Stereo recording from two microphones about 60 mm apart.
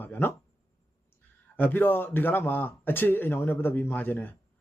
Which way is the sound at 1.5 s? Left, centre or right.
Left.